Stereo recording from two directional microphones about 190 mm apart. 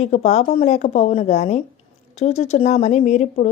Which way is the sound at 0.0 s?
35° left (ahead or behind).